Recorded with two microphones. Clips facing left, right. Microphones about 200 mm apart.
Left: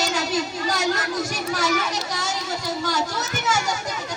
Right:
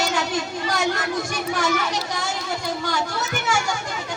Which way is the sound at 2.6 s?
40° left (ahead or behind).